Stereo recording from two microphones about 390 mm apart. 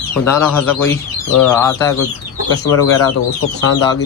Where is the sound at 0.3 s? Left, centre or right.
Centre.